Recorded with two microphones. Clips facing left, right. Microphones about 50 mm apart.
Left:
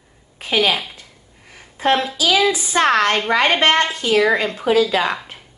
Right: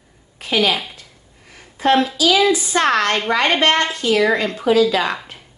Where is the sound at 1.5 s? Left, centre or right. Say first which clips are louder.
Right 2 dB; left.